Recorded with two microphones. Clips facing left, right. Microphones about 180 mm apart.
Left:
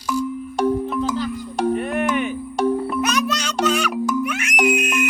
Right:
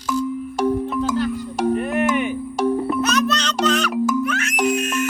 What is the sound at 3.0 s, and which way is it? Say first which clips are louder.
Music: right 2 dB; 10° left (ahead or behind).